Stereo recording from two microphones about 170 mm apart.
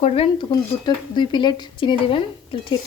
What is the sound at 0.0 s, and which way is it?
Speech, 35° left (ahead or behind).